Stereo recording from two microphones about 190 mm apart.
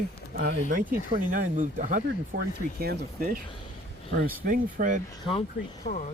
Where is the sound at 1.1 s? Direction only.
45° right (ahead or behind).